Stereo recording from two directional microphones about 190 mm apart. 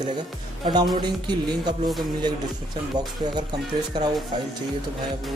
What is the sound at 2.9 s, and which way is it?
Speech, 20° right (ahead or behind).